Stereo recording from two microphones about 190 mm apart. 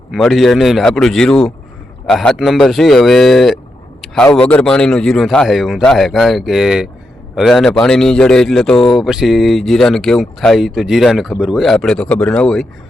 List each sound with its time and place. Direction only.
0.1 s speech: centre (ahead or behind)